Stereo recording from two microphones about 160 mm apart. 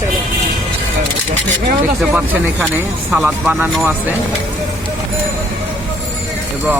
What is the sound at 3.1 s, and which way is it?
Speech, 10° right (ahead or behind).